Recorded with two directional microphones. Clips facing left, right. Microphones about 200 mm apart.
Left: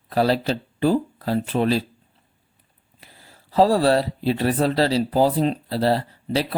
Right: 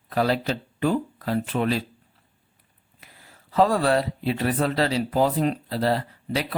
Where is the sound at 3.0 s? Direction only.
30° left (ahead or behind).